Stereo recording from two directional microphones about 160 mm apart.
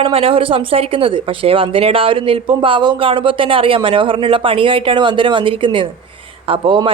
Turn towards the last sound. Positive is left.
turn(degrees=-30)  # may be behind; listen again after turning